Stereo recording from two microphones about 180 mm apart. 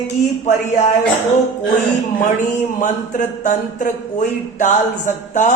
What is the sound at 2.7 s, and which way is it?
A man's voice, 45° left (ahead or behind).